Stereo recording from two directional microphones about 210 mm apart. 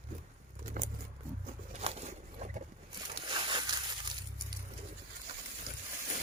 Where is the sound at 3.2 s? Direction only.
25° right (ahead or behind).